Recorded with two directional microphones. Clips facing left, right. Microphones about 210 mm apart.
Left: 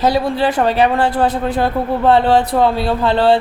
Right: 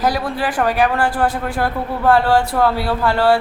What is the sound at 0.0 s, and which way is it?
A man's voice, 25° left (ahead or behind).